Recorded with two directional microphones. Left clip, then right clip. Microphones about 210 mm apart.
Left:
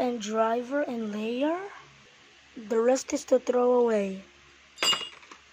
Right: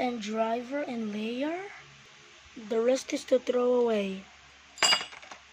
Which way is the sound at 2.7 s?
10° left (ahead or behind).